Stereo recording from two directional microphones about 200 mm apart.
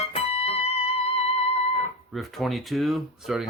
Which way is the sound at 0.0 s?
30° left (ahead or behind).